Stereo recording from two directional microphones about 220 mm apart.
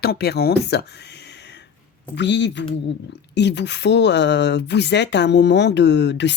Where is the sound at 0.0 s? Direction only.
45° left (ahead or behind).